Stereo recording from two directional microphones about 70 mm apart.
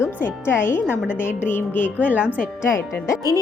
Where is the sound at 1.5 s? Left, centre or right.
Left.